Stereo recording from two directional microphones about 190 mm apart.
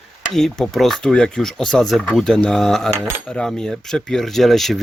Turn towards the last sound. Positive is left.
turn(degrees=0)  # may be behind; listen again after turning